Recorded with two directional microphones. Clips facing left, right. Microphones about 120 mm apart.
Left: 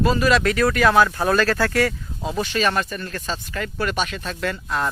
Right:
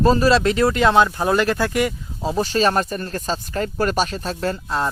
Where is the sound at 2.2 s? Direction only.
40° right (ahead or behind).